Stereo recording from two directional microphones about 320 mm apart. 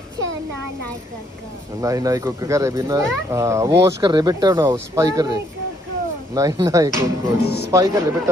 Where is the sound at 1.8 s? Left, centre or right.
Centre.